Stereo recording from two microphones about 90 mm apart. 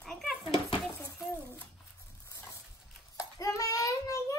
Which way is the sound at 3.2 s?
35° left (ahead or behind).